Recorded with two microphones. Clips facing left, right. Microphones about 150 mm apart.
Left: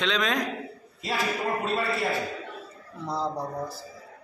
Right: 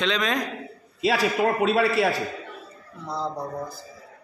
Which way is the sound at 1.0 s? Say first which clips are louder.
Right 7 dB; 85° right.